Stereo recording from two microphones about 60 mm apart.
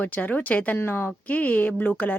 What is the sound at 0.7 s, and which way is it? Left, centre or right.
Speech, left.